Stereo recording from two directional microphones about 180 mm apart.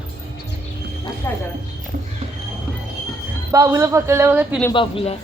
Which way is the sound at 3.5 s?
15° right (ahead or behind).